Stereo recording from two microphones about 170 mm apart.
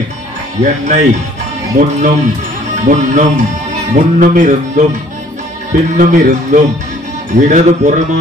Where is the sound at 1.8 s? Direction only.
55° right (ahead or behind).